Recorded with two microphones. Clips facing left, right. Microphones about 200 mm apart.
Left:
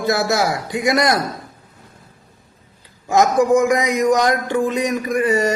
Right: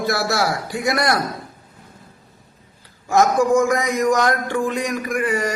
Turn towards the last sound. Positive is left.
turn(degrees=25)  # may be behind; listen again after turning